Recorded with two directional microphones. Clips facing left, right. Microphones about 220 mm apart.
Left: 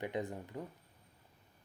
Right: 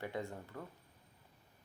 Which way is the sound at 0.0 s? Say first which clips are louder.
Left 3 dB; 20° left (ahead or behind).